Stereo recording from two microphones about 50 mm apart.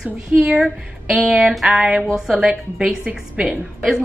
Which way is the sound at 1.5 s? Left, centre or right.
Centre.